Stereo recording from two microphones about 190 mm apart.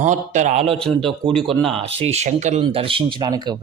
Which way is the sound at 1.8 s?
30° right (ahead or behind).